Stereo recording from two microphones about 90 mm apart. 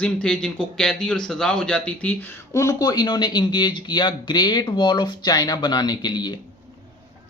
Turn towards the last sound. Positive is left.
turn(degrees=50)  # may be behind; listen again after turning